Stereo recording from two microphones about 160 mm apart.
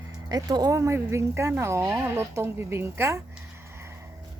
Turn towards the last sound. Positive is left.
turn(degrees=-15)  # may be behind; listen again after turning